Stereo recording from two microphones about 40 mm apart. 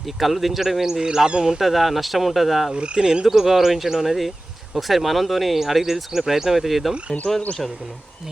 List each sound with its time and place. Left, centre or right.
0.2 s a man's voice: centre
1.3 s speech: right
1.5 s speech: centre
2.7 s speech: right
3.2 s speech: centre